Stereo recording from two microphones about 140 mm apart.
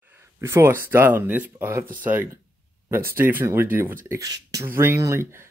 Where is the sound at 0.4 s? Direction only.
20° right (ahead or behind).